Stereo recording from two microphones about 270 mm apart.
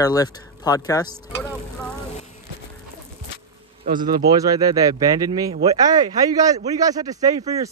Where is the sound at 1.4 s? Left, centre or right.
Centre.